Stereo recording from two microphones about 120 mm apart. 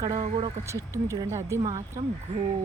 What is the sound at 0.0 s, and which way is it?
Speech, 30° right (ahead or behind).